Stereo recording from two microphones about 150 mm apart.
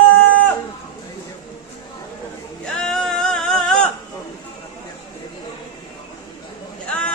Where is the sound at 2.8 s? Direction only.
5° left (ahead or behind).